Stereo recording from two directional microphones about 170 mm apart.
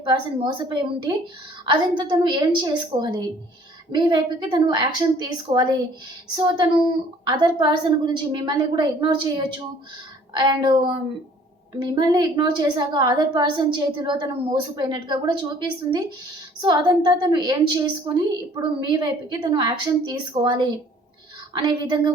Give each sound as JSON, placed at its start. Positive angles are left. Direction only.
{"t": 0.0, "sound": "a woman's voice", "side_deg": -30}